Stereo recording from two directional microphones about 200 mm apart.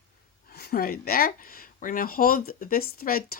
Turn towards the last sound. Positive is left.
turn(degrees=45)  # may be behind; listen again after turning